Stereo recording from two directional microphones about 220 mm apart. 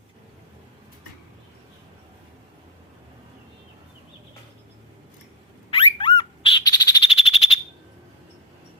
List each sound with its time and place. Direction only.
5.7 s frog: 25° left (ahead or behind)